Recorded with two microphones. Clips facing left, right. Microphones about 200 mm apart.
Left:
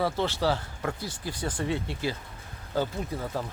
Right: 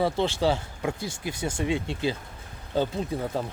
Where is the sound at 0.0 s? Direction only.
20° right (ahead or behind).